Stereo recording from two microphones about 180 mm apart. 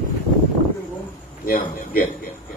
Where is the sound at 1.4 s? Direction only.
50° left (ahead or behind).